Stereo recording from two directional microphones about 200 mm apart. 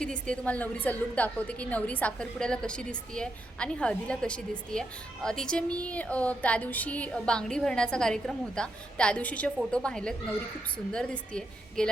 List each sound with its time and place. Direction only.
0.0 s a woman's voice: 5° left (ahead or behind)